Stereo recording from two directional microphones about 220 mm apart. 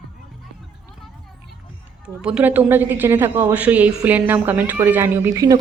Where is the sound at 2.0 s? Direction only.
5° right (ahead or behind).